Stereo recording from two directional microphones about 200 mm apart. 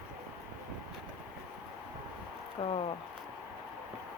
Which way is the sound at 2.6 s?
30° left (ahead or behind).